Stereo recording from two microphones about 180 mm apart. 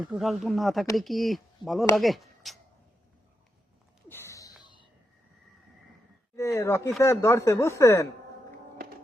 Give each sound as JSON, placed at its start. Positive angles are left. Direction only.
{"t": 0.0, "sound": "speech", "side_deg": 0}
{"t": 4.1, "sound": "a sound", "side_deg": 15}
{"t": 6.3, "sound": "speech", "side_deg": 15}